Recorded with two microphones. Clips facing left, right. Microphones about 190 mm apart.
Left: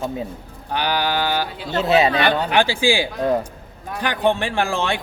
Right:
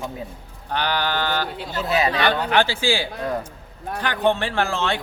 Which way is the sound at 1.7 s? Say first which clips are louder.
Left 6 dB; 25° left (ahead or behind).